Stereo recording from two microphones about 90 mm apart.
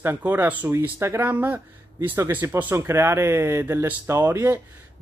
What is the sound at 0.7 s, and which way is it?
Speech, 30° right (ahead or behind).